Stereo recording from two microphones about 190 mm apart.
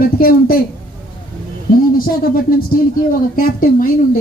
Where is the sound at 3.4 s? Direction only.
45° left (ahead or behind).